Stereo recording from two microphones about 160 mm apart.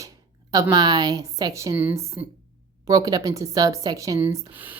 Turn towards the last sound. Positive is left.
turn(degrees=-15)  # may be behind; listen again after turning